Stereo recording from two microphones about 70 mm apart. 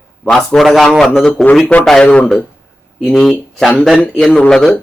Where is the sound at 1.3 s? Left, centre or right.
Left; by 4.7 s centre.